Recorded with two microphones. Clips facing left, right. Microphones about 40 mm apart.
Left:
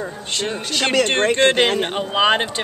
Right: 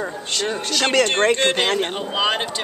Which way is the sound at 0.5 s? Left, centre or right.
Centre.